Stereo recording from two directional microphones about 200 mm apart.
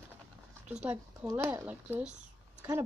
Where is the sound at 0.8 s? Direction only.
10° right (ahead or behind).